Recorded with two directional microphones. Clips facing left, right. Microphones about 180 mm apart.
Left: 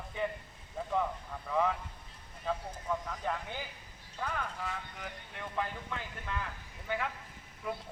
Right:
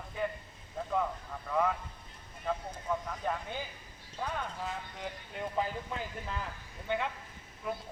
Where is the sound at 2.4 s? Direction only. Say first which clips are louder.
Right 1 dB; 5° right (ahead or behind).